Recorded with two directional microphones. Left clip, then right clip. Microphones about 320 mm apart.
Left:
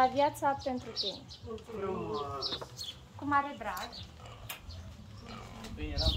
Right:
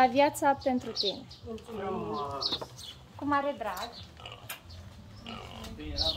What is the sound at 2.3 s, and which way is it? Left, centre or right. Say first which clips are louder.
A woman's voice: right 4 dB; right.